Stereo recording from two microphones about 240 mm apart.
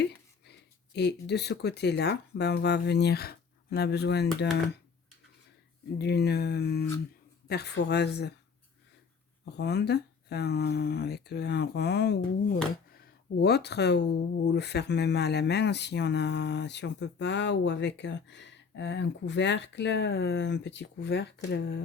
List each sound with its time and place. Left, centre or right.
0.9 s speech: left
6.0 s speech: left
9.5 s speech: left